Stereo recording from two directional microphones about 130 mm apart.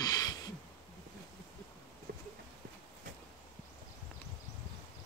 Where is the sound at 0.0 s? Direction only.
30° left (ahead or behind).